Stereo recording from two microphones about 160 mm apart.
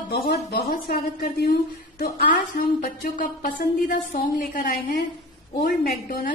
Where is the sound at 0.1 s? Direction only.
90° left.